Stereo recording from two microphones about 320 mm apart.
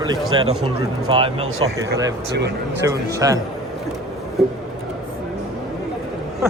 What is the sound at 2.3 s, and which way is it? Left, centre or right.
Speech, right.